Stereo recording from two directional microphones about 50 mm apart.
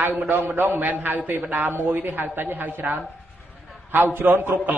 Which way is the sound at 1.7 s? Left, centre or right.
Right.